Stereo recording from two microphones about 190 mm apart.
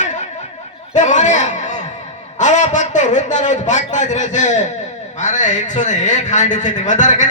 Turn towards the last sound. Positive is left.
turn(degrees=40)  # may be behind; listen again after turning